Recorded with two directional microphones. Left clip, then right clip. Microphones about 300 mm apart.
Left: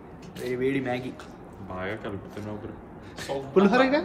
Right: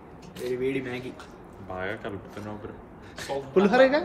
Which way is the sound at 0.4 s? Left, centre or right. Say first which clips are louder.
Left 1 dB; centre.